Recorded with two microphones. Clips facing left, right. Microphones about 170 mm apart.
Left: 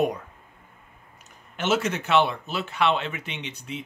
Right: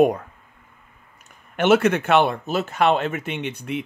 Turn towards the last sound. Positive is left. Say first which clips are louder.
# right 8 dB
turn(degrees=-60)  # may be behind; listen again after turning